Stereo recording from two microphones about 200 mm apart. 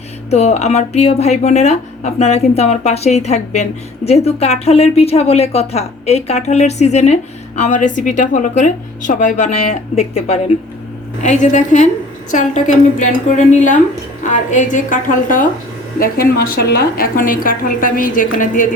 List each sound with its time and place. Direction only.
0.3 s a woman's voice: 30° left (ahead or behind)